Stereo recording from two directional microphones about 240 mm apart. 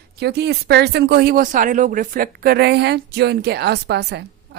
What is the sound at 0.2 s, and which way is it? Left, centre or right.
A woman's voice, right.